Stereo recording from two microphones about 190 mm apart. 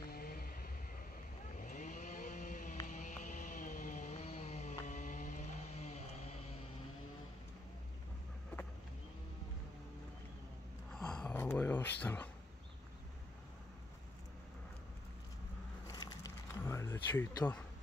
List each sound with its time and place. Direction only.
0.1 s vehicle: 50° left (ahead or behind)
1.6 s vehicle: 40° left (ahead or behind)
2.9 s music: 45° left (ahead or behind)
4.8 s vehicle: 40° left (ahead or behind)
10.9 s a sound: 5° left (ahead or behind)
15.9 s a sound: 20° left (ahead or behind)